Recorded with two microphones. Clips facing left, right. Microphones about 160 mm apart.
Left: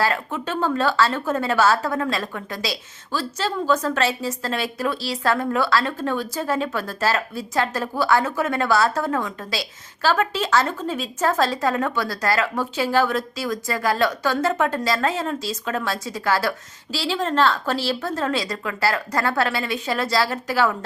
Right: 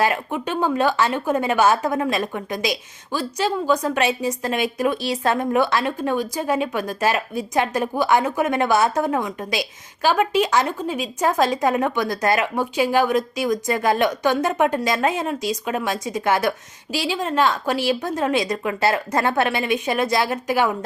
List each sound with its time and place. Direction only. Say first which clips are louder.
0.0 s a woman's voice: right 2 dB; 15° right (ahead or behind)